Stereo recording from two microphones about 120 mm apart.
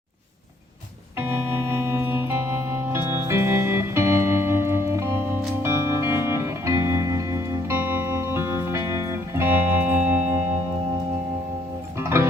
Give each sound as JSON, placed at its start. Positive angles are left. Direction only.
{"t": 1.5, "sound": "music", "side_deg": -20}
{"t": 11.9, "sound": "music", "side_deg": -20}